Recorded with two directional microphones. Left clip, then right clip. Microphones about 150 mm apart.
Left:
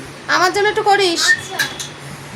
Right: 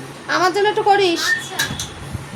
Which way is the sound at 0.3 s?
10° left (ahead or behind).